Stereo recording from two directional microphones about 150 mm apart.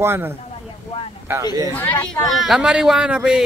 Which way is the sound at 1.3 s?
20° right (ahead or behind).